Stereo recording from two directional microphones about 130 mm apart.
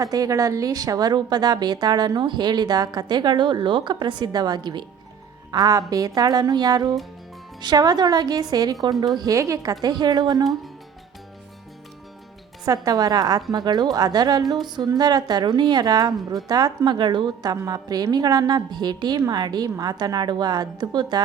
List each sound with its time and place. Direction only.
0.0 s speech: 25° right (ahead or behind)
12.6 s speech: 25° right (ahead or behind)